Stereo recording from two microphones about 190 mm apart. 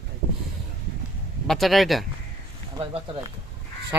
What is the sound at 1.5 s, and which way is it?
Speech, centre (ahead or behind).